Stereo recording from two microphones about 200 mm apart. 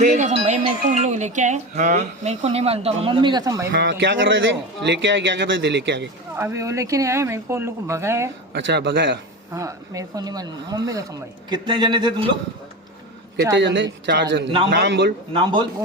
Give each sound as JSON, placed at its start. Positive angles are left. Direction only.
{"t": 0.0, "sound": "speech", "side_deg": -35}
{"t": 3.7, "sound": "a man's voice", "side_deg": -60}
{"t": 6.3, "sound": "speech", "side_deg": -10}
{"t": 8.5, "sound": "a man's voice", "side_deg": -60}
{"t": 9.5, "sound": "speech", "side_deg": -15}
{"t": 13.6, "sound": "a man's voice", "side_deg": -65}
{"t": 15.3, "sound": "speech", "side_deg": -25}